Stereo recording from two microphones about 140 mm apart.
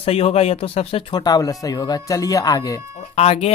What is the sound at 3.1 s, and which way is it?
Speech, 45° left (ahead or behind).